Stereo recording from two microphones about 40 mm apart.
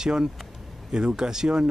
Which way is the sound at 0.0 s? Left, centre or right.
Centre.